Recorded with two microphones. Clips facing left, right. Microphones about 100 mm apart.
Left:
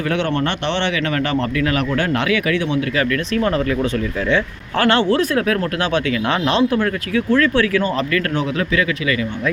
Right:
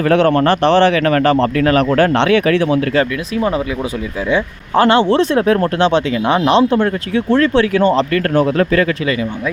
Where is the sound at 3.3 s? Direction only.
15° right (ahead or behind).